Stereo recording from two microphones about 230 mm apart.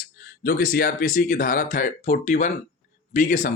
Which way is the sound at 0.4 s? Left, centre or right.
Left.